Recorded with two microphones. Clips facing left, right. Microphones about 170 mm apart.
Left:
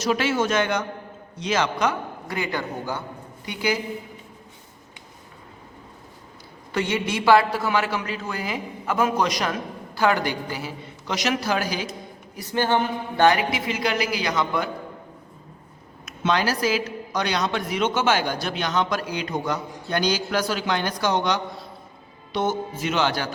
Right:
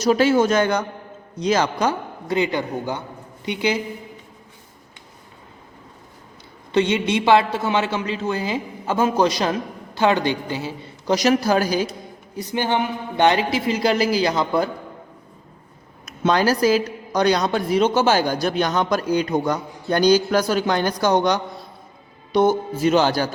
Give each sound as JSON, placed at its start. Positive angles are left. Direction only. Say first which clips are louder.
{"t": 0.0, "sound": "a woman's voice", "louder": "right 6 dB", "side_deg": -40}
{"t": 2.2, "sound": "a man's voice", "louder": "right 8 dB", "side_deg": -20}
{"t": 6.7, "sound": "a man's voice", "louder": "right 6 dB", "side_deg": -20}
{"t": 12.4, "sound": "a woman's voice", "louder": "even", "side_deg": -15}
{"t": 16.0, "sound": "a woman's voice", "louder": "right 5 dB", "side_deg": -40}